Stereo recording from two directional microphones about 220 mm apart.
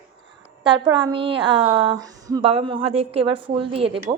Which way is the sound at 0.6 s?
20° right (ahead or behind).